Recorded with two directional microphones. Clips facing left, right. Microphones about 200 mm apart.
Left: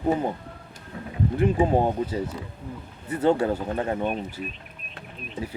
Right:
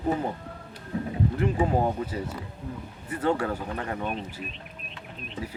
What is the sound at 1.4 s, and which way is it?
Speech, 25° left (ahead or behind).